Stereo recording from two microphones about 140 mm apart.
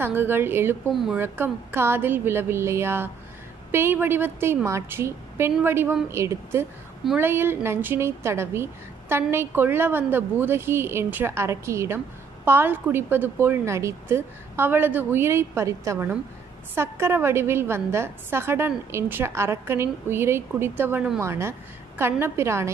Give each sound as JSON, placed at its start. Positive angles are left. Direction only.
{"t": 0.0, "sound": "a woman's voice", "side_deg": -15}
{"t": 0.9, "sound": "speech", "side_deg": -5}
{"t": 1.2, "sound": "a woman's voice", "side_deg": -15}